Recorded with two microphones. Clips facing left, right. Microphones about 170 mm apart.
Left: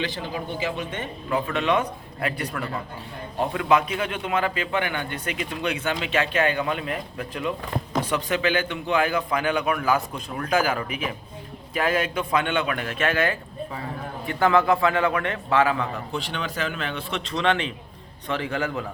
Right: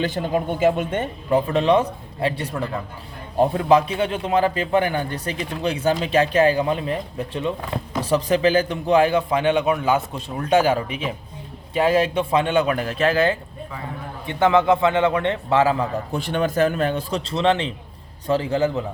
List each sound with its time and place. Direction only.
0.0 s speech: 50° right (ahead or behind)
1.5 s a man's voice: 35° right (ahead or behind)
16.1 s a man's voice: 50° right (ahead or behind); by 18.9 s 25° right (ahead or behind)